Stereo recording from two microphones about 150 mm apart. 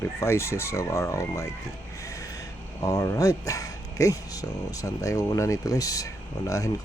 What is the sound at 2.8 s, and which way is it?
Speech, 20° left (ahead or behind).